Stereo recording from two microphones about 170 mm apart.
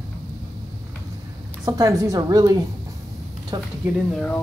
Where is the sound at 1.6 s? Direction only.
20° right (ahead or behind).